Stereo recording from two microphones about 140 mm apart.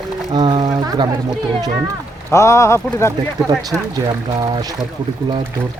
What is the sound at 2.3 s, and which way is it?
Speech, 20° left (ahead or behind).